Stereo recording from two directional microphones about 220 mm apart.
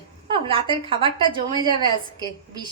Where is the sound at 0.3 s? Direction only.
25° right (ahead or behind).